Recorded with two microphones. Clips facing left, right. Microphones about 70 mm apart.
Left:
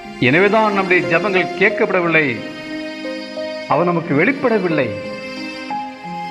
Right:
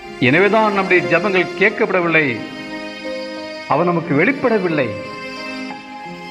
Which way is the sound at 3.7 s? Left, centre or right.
Centre.